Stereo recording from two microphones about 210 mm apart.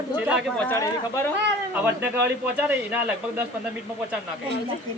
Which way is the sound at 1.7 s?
10° right (ahead or behind).